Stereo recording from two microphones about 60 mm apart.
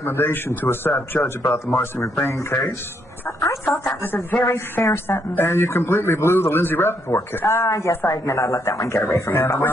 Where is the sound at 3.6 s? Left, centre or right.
Centre.